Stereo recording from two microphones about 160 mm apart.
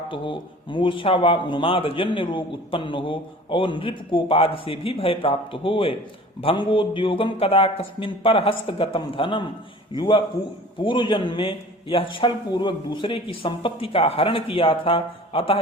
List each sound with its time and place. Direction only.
0.1 s a man's voice: 30° left (ahead or behind)